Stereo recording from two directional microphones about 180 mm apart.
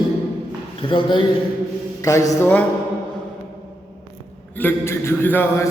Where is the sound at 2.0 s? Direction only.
20° left (ahead or behind).